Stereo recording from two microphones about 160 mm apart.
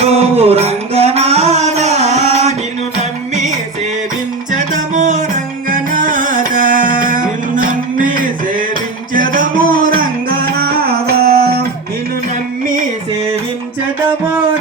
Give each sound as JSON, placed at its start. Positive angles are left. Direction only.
{"t": 0.0, "sound": "music", "side_deg": -40}
{"t": 4.5, "sound": "music", "side_deg": -50}